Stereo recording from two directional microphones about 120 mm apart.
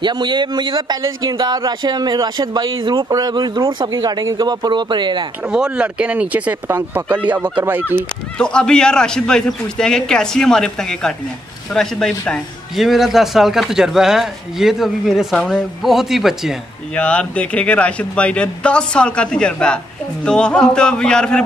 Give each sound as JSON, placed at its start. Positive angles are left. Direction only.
{"t": 0.0, "sound": "speech", "side_deg": -40}
{"t": 5.5, "sound": "speech", "side_deg": -10}
{"t": 8.4, "sound": "a man's voice", "side_deg": 5}
{"t": 16.9, "sound": "a man's voice", "side_deg": 10}